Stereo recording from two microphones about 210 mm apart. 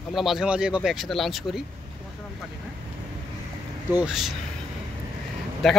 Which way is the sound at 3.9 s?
Centre (ahead or behind).